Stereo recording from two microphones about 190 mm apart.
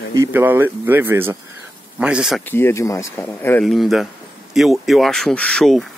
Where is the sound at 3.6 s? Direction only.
Centre (ahead or behind).